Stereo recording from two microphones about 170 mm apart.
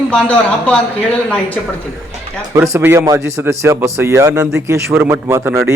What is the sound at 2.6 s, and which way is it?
A man's voice, 15° right (ahead or behind).